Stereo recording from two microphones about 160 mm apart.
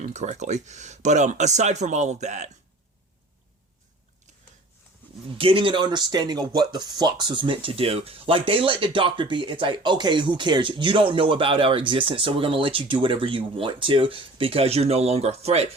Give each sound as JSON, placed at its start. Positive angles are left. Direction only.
{"t": 0.0, "sound": "speech", "side_deg": -45}
{"t": 5.4, "sound": "speech", "side_deg": -35}